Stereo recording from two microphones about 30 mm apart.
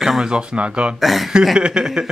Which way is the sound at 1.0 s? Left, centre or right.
Centre.